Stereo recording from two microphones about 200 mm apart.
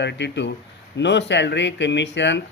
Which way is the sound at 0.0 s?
60° left (ahead or behind).